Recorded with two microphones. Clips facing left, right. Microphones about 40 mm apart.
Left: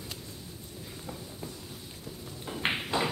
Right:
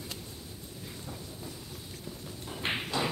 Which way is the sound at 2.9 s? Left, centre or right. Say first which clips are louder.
Left 2 dB; left.